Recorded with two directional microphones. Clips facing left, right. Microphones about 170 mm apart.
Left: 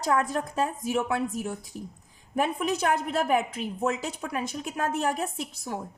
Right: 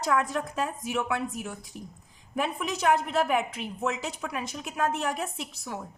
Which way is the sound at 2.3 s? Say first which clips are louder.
Left 4 dB; 45° left (ahead or behind).